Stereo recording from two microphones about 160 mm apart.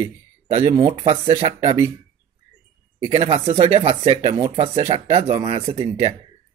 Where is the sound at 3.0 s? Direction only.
40° right (ahead or behind).